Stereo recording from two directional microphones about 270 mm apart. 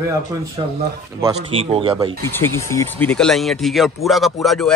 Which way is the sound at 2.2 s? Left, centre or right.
Centre.